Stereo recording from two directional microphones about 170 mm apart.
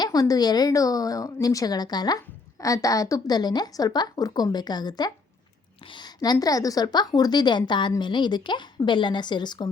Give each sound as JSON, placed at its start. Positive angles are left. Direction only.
{"t": 0.0, "sound": "a woman's voice", "side_deg": 20}